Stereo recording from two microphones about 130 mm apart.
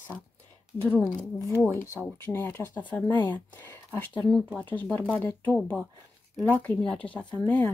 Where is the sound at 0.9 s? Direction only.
20° left (ahead or behind).